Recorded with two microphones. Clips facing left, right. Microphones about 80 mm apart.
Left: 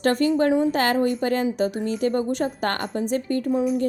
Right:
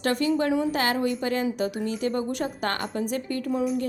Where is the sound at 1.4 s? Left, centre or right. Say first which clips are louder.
Left 3 dB; left.